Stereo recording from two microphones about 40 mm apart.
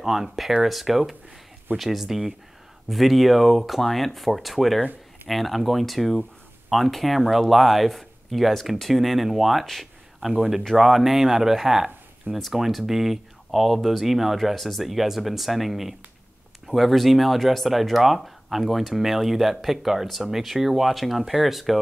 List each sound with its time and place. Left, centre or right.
0.0 s speech: centre